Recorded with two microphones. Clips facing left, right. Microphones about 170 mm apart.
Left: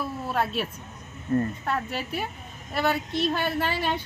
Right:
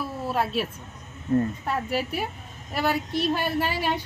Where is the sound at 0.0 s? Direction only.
5° right (ahead or behind).